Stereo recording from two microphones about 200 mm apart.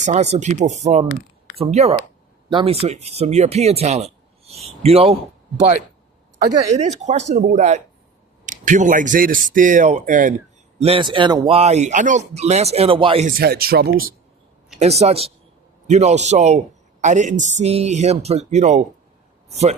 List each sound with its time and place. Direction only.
0.0 s speech: 35° right (ahead or behind)
6.7 s speech: 35° right (ahead or behind)
10.8 s speech: 30° right (ahead or behind)
13.2 s speech: 50° right (ahead or behind)
14.8 s speech: 30° right (ahead or behind)